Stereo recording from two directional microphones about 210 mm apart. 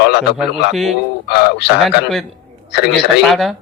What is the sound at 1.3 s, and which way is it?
Speech, 50° left (ahead or behind).